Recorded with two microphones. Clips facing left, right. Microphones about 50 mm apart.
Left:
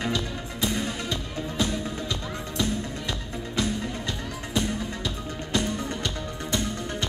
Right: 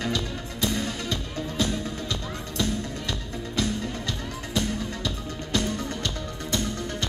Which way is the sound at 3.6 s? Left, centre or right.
Left.